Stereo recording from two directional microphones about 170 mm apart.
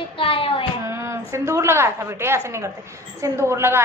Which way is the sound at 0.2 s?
35° left (ahead or behind).